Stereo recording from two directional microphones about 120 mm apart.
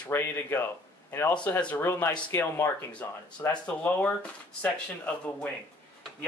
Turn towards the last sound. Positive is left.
turn(degrees=10)  # may be behind; listen again after turning